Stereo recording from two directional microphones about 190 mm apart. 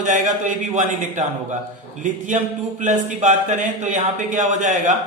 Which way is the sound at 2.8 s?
40° right (ahead or behind).